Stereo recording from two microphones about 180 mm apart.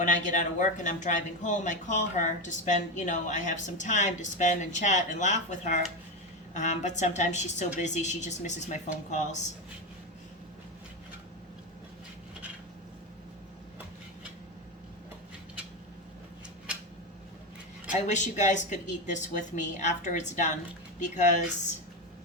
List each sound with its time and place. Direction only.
0.0 s a woman's voice: 45° left (ahead or behind)
17.9 s speech: 40° left (ahead or behind)